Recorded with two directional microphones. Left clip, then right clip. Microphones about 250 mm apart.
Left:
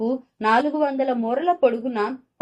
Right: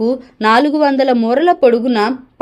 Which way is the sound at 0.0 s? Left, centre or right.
Right.